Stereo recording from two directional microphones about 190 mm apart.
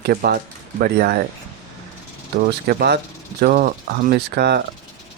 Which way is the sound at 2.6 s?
55° right (ahead or behind).